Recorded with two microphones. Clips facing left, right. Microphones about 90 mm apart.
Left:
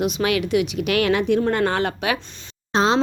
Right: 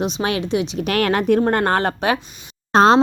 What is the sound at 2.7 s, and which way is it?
Speech, 45° right (ahead or behind).